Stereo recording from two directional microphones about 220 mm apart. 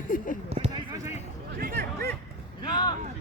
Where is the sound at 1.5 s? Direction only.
45° right (ahead or behind).